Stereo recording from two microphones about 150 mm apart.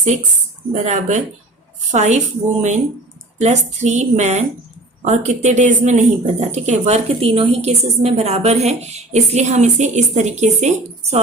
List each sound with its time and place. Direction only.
0.7 s a woman's voice: 55° right (ahead or behind)